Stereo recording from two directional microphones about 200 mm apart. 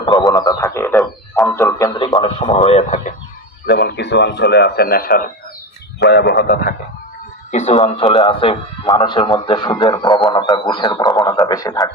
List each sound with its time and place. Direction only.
0.0 s frog: 20° left (ahead or behind)
1.5 s speech: 15° left (ahead or behind)
2.1 s speech: 25° left (ahead or behind)
3.7 s speech: 50° left (ahead or behind)
6.0 s speech: 55° left (ahead or behind)
7.5 s a man's voice: 35° left (ahead or behind); by 11.9 s 20° left (ahead or behind)